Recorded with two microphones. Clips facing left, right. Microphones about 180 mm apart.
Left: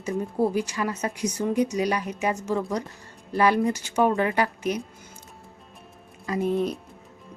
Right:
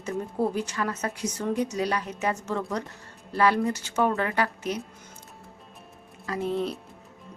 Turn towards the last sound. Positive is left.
turn(degrees=15)  # may be behind; listen again after turning